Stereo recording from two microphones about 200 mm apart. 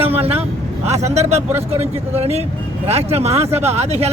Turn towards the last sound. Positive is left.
turn(degrees=-30)  # may be behind; listen again after turning